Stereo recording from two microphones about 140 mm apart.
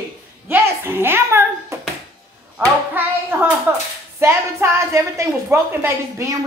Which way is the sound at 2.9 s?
15° right (ahead or behind).